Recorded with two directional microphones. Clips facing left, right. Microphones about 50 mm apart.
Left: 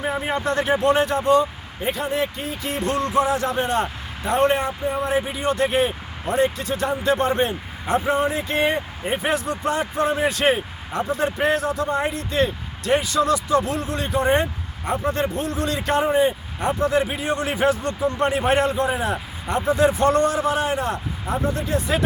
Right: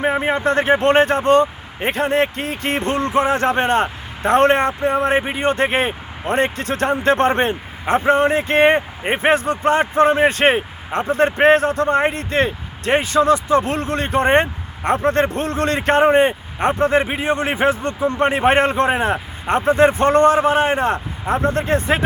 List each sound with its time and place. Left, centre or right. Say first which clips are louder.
0.0 s a man's voice: right 6 dB; right
2.8 s a man's voice: right 1 dB; right
21.3 s a man's voice: right 5 dB; right